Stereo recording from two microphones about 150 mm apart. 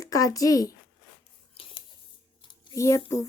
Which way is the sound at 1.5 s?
35° left (ahead or behind).